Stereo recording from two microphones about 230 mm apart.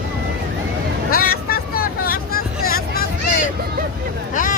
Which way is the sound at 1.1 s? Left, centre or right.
Left.